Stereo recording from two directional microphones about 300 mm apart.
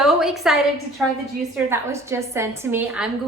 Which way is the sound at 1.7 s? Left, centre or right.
Centre.